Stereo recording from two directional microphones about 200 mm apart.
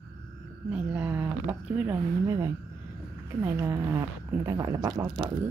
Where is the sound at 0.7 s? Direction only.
5° right (ahead or behind).